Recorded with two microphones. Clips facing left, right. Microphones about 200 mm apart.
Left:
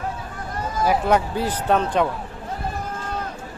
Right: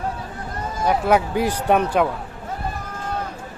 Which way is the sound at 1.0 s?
10° right (ahead or behind).